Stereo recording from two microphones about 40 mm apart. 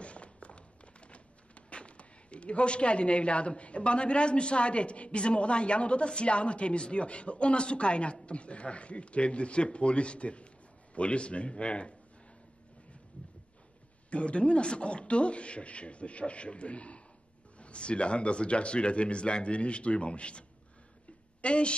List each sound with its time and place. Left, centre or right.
0.0 s a sound: left
11.0 s speech: left
14.1 s speech: left